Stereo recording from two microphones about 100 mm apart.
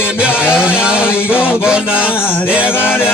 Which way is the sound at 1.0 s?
20° left (ahead or behind).